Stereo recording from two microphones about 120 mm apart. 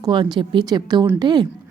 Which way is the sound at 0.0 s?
40° right (ahead or behind).